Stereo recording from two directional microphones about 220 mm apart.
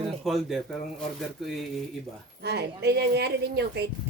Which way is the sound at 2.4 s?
50° right (ahead or behind).